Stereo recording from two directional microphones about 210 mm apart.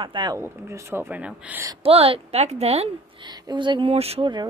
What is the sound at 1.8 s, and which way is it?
A woman's voice, 25° right (ahead or behind).